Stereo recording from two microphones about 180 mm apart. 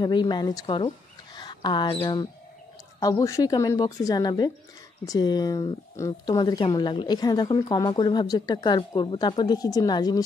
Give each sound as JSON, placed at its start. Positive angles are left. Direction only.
{"t": 0.0, "sound": "speech", "side_deg": 25}